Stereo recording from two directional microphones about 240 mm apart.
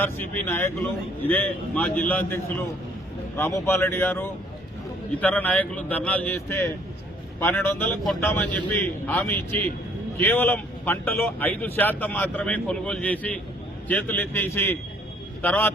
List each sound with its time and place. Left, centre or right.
0.4 s speech: centre